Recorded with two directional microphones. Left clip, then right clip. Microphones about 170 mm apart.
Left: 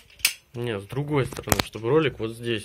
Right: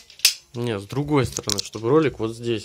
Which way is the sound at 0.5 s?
20° right (ahead or behind).